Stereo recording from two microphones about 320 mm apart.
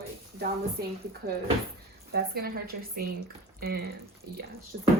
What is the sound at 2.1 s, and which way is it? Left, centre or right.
Speech, right.